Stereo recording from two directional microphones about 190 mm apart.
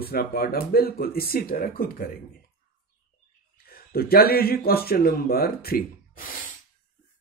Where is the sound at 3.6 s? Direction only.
55° left (ahead or behind).